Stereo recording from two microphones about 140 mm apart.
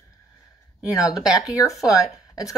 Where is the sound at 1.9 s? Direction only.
25° left (ahead or behind).